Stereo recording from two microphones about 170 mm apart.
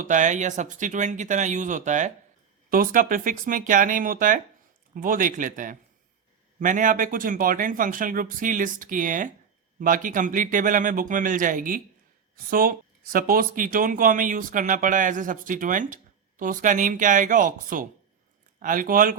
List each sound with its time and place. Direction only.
0.0 s speech: 45° right (ahead or behind)